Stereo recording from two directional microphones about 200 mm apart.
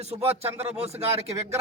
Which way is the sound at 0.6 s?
30° right (ahead or behind).